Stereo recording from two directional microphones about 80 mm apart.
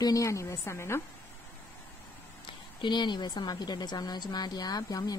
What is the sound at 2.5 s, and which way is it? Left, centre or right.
A woman's voice, left.